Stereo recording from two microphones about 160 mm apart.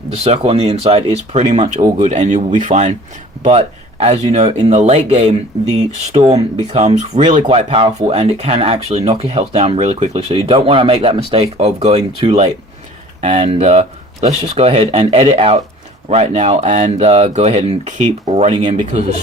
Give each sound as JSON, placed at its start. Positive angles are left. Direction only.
{"t": 0.1, "sound": "speech", "side_deg": -40}
{"t": 4.0, "sound": "speech", "side_deg": -40}